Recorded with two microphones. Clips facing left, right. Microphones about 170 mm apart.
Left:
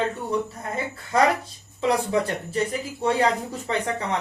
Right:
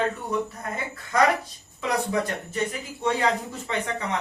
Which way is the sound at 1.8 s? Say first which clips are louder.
Left 3 dB; 30° left (ahead or behind).